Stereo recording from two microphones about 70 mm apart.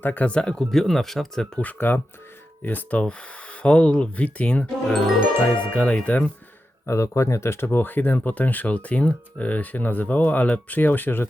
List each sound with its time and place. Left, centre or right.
0.0 s speech: left; by 1.5 s centre
1.5 s speech: left
6.8 s speech: left